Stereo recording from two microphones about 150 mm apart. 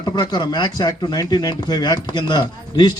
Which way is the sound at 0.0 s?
30° left (ahead or behind).